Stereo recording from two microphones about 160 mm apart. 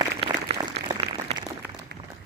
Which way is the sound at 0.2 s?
30° right (ahead or behind).